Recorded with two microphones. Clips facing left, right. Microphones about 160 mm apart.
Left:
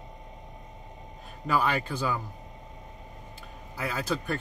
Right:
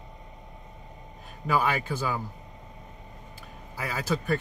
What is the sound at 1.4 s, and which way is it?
Speech, centre (ahead or behind).